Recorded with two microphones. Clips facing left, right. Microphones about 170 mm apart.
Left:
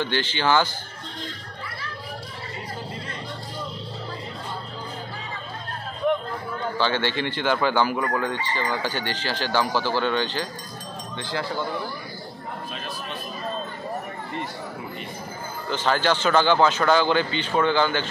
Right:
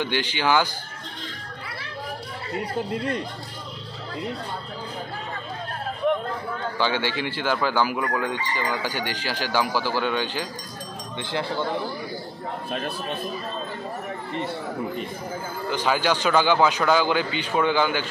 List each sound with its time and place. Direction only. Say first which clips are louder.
0.0 s speech: even; 15° right (ahead or behind)
2.5 s a man's voice: right 9 dB; 60° right (ahead or behind)
6.8 s speech: left 1 dB; 10° right (ahead or behind)
12.7 s a man's voice: right 5 dB; 55° right (ahead or behind)
15.7 s speech: left 1 dB; 10° right (ahead or behind)